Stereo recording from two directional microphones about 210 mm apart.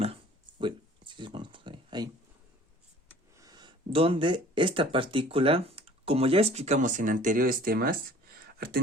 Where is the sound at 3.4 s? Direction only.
20° right (ahead or behind).